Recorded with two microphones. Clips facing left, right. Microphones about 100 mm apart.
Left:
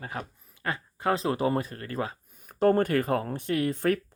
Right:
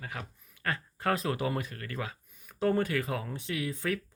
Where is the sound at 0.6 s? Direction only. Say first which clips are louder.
Left 3 dB; 20° left (ahead or behind).